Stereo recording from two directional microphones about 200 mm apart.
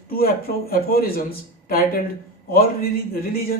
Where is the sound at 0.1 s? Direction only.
45° left (ahead or behind).